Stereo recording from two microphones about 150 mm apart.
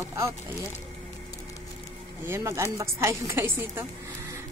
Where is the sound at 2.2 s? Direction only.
15° right (ahead or behind).